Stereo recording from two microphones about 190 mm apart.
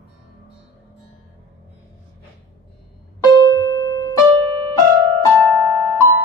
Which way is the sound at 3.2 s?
20° left (ahead or behind).